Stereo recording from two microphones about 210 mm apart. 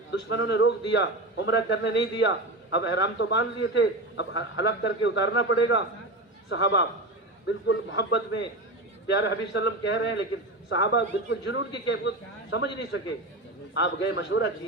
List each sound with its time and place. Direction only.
0.1 s a man's voice: 55° left (ahead or behind)